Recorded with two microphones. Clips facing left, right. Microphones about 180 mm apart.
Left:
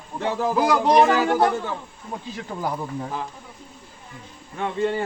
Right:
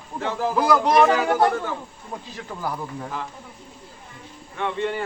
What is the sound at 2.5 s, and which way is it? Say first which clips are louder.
Speech: left 3 dB; 20° left (ahead or behind).